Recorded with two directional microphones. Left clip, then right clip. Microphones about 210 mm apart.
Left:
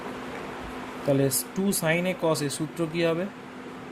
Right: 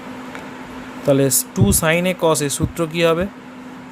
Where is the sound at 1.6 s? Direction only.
45° right (ahead or behind).